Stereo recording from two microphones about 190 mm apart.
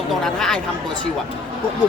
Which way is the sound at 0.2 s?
Centre (ahead or behind).